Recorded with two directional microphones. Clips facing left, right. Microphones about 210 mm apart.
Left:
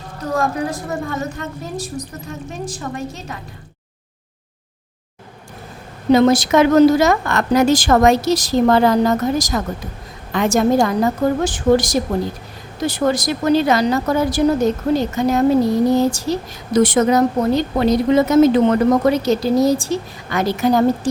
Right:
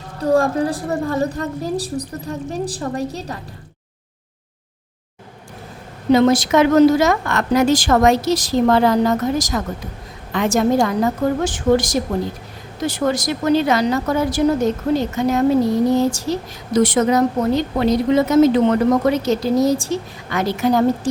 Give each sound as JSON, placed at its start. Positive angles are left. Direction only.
{"t": 0.2, "sound": "a woman's voice", "side_deg": -30}
{"t": 6.1, "sound": "speech", "side_deg": 40}
{"t": 16.7, "sound": "speech", "side_deg": 50}